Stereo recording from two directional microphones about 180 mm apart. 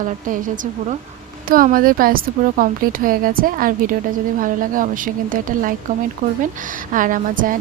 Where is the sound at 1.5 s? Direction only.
50° right (ahead or behind).